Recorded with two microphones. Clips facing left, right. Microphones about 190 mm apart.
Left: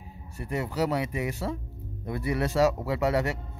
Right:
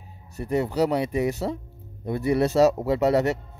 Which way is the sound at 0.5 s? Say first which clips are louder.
Right 5 dB; 35° right (ahead or behind).